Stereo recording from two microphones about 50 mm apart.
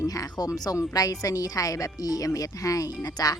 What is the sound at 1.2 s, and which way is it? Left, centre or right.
Speech, left.